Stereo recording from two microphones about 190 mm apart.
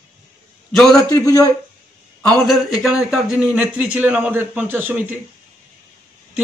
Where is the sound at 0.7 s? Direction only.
Centre (ahead or behind).